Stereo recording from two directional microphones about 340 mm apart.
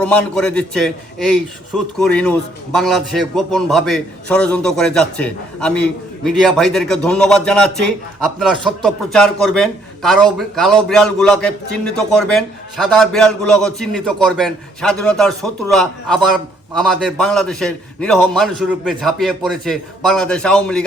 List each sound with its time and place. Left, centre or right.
0.0 s a man's voice: centre